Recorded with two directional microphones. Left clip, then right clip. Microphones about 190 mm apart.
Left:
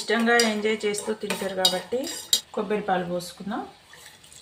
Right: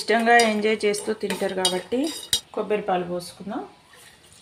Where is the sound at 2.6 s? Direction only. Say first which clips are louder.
Right 2 dB; 20° right (ahead or behind).